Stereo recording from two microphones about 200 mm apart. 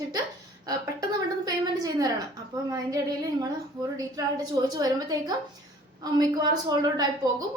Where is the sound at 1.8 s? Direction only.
20° right (ahead or behind).